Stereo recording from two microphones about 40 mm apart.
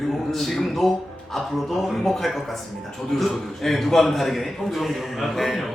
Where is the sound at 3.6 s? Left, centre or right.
Centre.